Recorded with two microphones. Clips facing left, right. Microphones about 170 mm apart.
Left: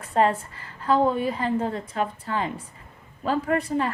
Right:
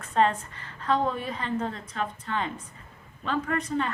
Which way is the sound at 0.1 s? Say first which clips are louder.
Left 2 dB; 30° left (ahead or behind).